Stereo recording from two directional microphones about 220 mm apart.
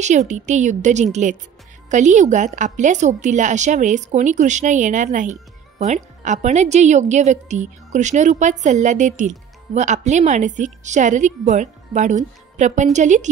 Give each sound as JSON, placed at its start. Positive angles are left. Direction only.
{"t": 0.3, "sound": "a woman's voice", "side_deg": -30}